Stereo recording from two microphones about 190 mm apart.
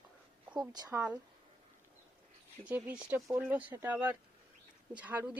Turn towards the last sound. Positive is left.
turn(degrees=-10)  # may be behind; listen again after turning